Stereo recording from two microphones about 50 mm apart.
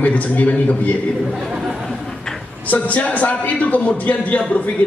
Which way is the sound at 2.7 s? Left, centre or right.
Left.